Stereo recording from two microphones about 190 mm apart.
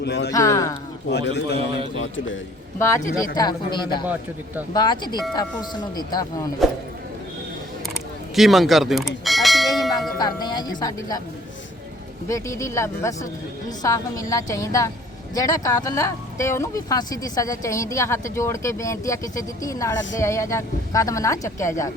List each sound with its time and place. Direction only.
0.0 s speech: 60° left (ahead or behind)
0.3 s speech: 15° left (ahead or behind)
1.1 s a man's voice: 65° left (ahead or behind)
2.0 s a man's voice: 90° left
2.7 s speech: 15° left (ahead or behind)
4.0 s speech: 10° right (ahead or behind)
4.7 s speech: 20° left (ahead or behind)
8.4 s speech: centre (ahead or behind)
10.2 s speech: 20° left (ahead or behind)
12.3 s speech: 15° left (ahead or behind)